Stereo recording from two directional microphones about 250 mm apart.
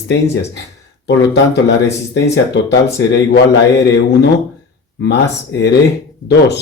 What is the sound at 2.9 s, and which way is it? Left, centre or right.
Speech, left.